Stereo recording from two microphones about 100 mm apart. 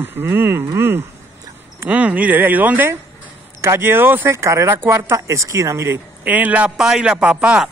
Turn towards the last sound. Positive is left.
turn(degrees=-10)  # may be behind; listen again after turning